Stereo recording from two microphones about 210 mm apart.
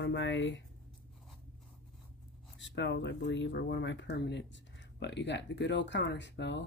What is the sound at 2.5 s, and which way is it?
Speech, 60° left (ahead or behind).